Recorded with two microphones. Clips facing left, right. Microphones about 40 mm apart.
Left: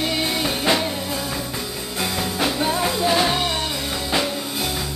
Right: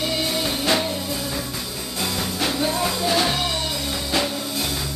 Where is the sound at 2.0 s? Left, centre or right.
Centre.